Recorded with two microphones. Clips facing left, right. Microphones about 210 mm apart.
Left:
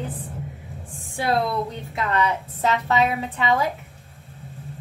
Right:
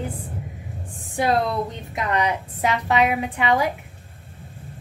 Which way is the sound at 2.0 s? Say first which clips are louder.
Even; 15° right (ahead or behind).